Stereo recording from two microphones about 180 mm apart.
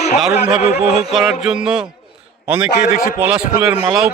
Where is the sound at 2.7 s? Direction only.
40° left (ahead or behind).